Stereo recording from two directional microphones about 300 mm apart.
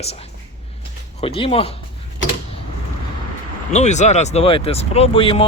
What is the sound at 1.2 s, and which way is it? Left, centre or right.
Speech, centre.